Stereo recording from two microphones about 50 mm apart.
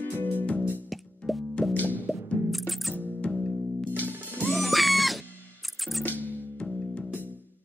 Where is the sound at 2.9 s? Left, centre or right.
Left.